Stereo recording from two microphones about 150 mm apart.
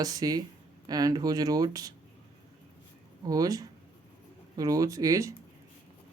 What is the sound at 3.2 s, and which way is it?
Speech, 25° right (ahead or behind).